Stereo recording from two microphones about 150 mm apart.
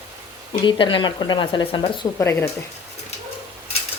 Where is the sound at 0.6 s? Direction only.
35° left (ahead or behind).